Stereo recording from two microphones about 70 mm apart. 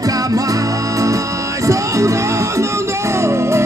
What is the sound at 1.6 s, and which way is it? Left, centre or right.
Music, right.